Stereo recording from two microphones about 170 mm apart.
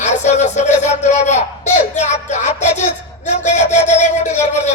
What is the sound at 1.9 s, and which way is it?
Music, 45° left (ahead or behind).